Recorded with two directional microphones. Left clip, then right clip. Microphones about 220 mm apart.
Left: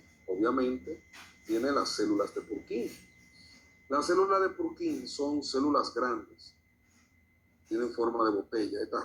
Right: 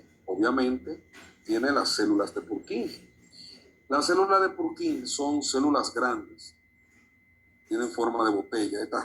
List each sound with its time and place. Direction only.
0.3 s a man's voice: 40° right (ahead or behind)
3.8 s speech: 35° right (ahead or behind)
7.7 s speech: 40° right (ahead or behind)